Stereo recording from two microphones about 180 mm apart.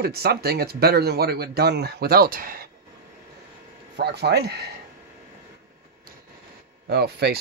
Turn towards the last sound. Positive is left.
turn(degrees=-65)  # may be behind; listen again after turning